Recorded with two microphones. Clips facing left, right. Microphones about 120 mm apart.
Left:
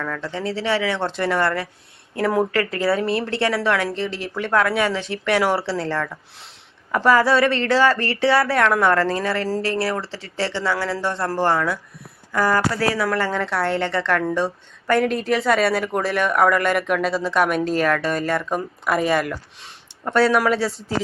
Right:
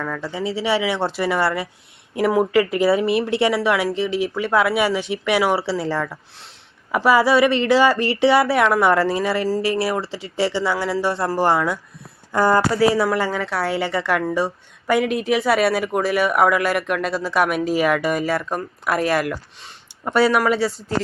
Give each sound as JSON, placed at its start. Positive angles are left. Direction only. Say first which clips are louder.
{"t": 0.0, "sound": "speech", "louder": "right 1 dB", "side_deg": -10}
{"t": 2.9, "sound": "a woman's voice", "louder": "right 3 dB", "side_deg": -5}
{"t": 7.8, "sound": "speech", "louder": "right 2 dB", "side_deg": -25}
{"t": 8.4, "sound": "speech", "louder": "right 1 dB", "side_deg": -10}
{"t": 12.3, "sound": "speech", "louder": "right 3 dB", "side_deg": -25}
{"t": 13.1, "sound": "a woman's voice", "louder": "right 1 dB", "side_deg": -10}